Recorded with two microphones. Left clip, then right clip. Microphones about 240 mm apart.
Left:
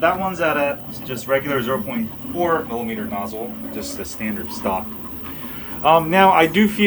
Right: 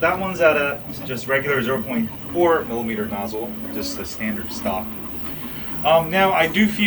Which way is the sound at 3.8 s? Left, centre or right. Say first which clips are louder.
Right 1 dB; centre.